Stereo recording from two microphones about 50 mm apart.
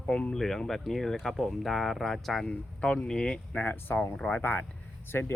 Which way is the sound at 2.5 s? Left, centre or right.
Left.